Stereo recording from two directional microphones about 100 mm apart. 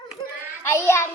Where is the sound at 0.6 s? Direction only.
25° left (ahead or behind).